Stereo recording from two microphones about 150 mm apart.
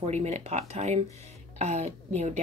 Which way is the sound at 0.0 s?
50° right (ahead or behind).